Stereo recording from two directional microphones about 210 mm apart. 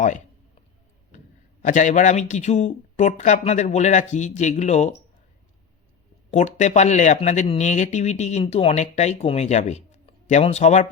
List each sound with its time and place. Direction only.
1.6 s speech: 35° left (ahead or behind)
6.3 s speech: 35° left (ahead or behind)